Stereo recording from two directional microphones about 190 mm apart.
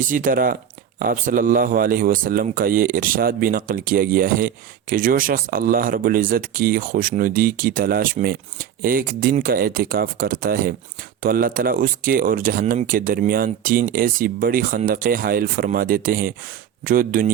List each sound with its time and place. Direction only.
0.1 s a man's voice: 45° right (ahead or behind)